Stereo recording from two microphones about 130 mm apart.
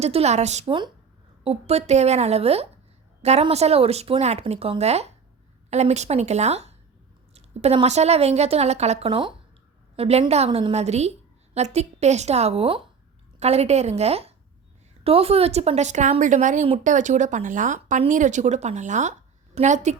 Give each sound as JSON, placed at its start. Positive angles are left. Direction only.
{"t": 0.0, "sound": "a woman's voice", "side_deg": -55}